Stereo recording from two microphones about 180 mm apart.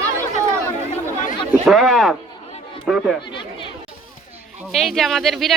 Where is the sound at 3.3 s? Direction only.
25° left (ahead or behind).